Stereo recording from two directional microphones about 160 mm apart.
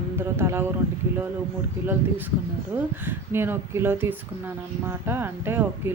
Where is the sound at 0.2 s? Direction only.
15° right (ahead or behind).